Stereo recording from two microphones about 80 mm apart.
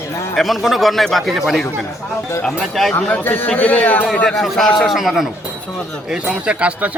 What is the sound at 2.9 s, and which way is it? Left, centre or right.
A man's voice, left.